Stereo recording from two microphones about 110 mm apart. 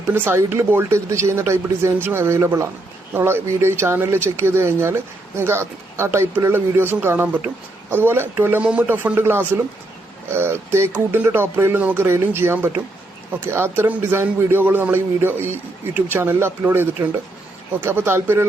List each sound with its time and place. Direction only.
0.1 s speech: 20° right (ahead or behind)